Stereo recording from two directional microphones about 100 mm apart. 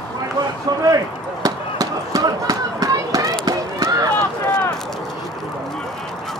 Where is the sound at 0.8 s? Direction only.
35° right (ahead or behind).